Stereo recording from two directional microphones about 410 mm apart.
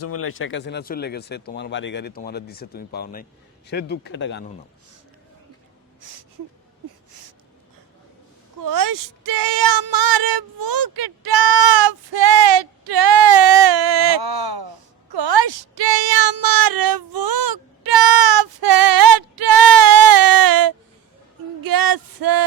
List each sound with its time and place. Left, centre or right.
0.0 s speech: left
8.6 s speech: right
21.6 s male singing: right